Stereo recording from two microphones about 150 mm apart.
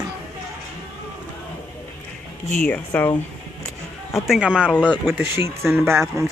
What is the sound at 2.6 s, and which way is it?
Speech, 10° left (ahead or behind).